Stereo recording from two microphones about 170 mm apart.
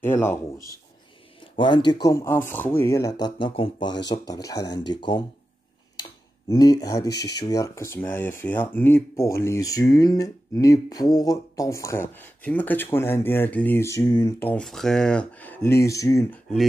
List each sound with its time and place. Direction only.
0.0 s speech: 15° left (ahead or behind)
1.6 s speech: 25° left (ahead or behind)
14.4 s speech: 5° left (ahead or behind)